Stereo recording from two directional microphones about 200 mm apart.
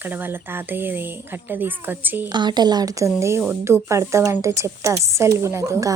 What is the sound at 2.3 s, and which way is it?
A woman's voice, 20° right (ahead or behind).